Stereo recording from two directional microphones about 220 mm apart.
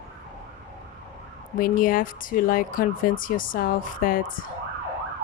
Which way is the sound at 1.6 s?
40° left (ahead or behind).